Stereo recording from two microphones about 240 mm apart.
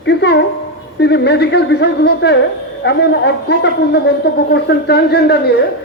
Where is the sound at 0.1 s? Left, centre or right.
Left.